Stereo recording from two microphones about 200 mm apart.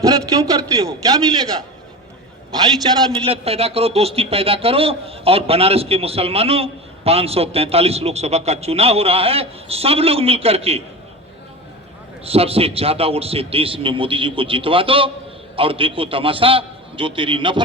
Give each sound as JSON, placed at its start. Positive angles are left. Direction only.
{"t": 0.0, "sound": "a man's voice", "side_deg": -15}
{"t": 3.1, "sound": "speech", "side_deg": -30}
{"t": 12.2, "sound": "speech", "side_deg": -30}